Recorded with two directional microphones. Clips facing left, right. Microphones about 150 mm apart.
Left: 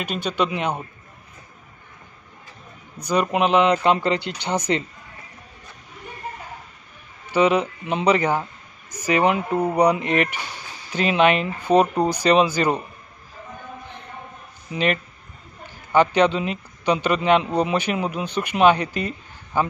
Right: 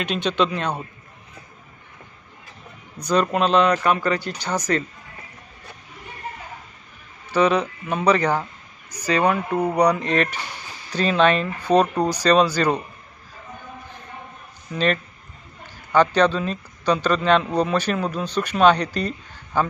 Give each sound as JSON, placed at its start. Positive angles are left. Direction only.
{"t": 0.0, "sound": "a man's voice", "side_deg": 10}
{"t": 3.1, "sound": "speech", "side_deg": 15}
{"t": 7.2, "sound": "a man's voice", "side_deg": 10}
{"t": 9.6, "sound": "a man's voice", "side_deg": 10}
{"t": 14.7, "sound": "speech", "side_deg": 15}
{"t": 16.2, "sound": "a man's voice", "side_deg": 15}
{"t": 18.9, "sound": "a sound", "side_deg": 10}